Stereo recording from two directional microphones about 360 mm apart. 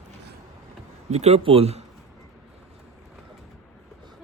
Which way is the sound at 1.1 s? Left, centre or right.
Centre.